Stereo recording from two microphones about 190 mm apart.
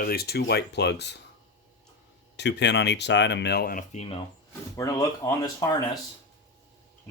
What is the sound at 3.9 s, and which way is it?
Speech, 35° left (ahead or behind).